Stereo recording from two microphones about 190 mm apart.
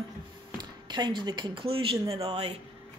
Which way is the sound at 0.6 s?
25° right (ahead or behind).